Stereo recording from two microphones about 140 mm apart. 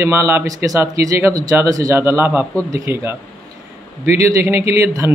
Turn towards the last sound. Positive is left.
turn(degrees=-20)  # may be behind; listen again after turning